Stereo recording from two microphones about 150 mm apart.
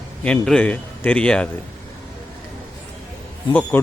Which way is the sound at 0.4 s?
5° left (ahead or behind).